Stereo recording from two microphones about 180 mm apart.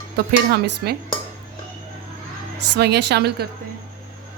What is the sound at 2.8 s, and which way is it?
Speech, 70° right (ahead or behind).